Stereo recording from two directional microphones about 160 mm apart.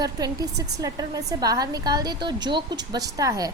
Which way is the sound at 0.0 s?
25° right (ahead or behind).